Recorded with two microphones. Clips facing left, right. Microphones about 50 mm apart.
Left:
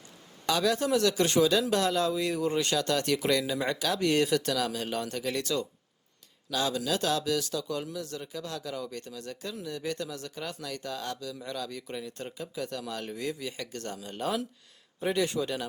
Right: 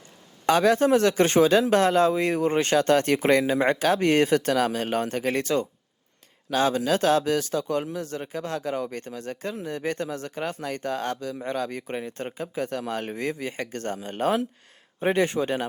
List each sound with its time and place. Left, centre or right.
0.4 s speech: right